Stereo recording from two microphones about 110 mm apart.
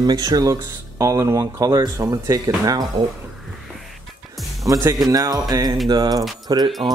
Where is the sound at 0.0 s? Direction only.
40° right (ahead or behind).